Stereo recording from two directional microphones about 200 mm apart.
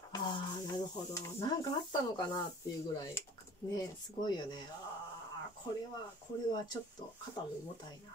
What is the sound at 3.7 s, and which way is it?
Speech, 20° left (ahead or behind).